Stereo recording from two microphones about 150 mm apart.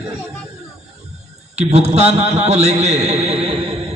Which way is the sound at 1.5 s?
45° right (ahead or behind).